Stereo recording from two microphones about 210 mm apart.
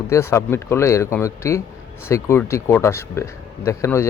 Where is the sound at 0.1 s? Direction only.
10° left (ahead or behind).